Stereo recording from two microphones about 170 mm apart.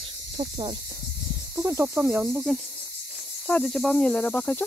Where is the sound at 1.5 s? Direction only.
15° right (ahead or behind).